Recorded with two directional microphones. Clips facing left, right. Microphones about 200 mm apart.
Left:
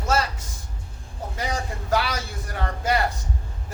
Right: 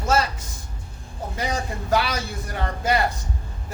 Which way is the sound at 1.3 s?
20° right (ahead or behind).